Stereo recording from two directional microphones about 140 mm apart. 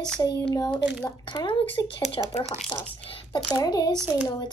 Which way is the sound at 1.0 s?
30° left (ahead or behind).